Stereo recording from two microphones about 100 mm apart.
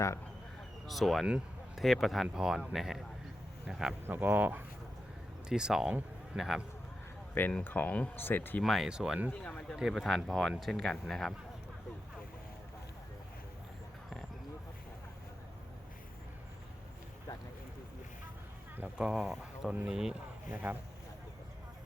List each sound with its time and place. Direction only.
0.9 s speech: centre (ahead or behind)
4.0 s speech: 20° right (ahead or behind)
7.3 s speech: 20° left (ahead or behind)
8.6 s speech: centre (ahead or behind)
9.3 s speech: 10° left (ahead or behind)
9.7 s speech: centre (ahead or behind)
18.8 s speech: 10° right (ahead or behind)